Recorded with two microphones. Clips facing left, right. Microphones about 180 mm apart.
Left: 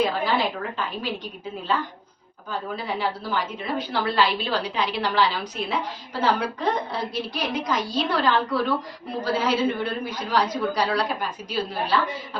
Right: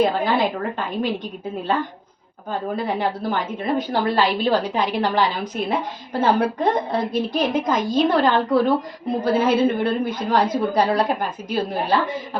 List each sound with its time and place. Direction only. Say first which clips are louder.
0.0 s a woman's voice: right 4 dB; 55° right (ahead or behind)
2.5 s a woman's voice: right 5 dB; 50° right (ahead or behind)